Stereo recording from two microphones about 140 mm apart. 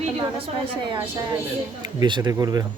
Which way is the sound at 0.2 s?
40° right (ahead or behind).